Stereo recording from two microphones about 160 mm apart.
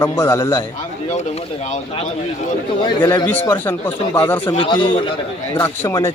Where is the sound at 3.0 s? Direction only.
25° left (ahead or behind).